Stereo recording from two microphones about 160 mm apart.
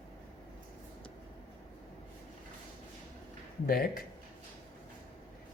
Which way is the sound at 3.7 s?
70° left (ahead or behind).